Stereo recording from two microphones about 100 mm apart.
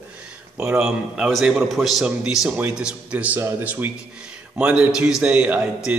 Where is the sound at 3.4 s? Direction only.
30° right (ahead or behind).